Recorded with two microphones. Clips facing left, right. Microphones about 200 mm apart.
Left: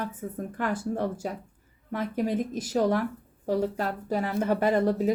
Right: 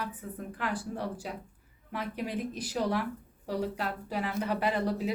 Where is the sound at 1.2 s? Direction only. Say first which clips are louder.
Left 6 dB; 45° left (ahead or behind).